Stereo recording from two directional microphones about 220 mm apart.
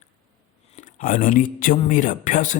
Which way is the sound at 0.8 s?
35° left (ahead or behind).